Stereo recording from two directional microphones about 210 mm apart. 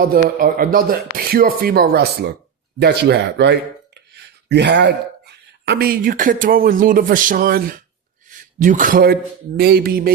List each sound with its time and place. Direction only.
0.0 s a man's voice: 45° right (ahead or behind)